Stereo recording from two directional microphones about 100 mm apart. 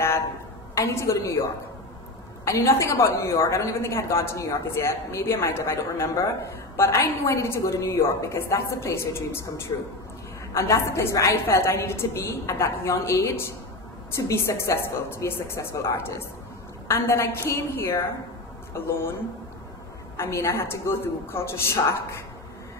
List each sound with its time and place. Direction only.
0.7 s a woman's voice: 30° left (ahead or behind)
9.7 s speech: 40° left (ahead or behind)
10.5 s a woman's voice: 30° left (ahead or behind)
20.2 s a woman's voice: 25° left (ahead or behind)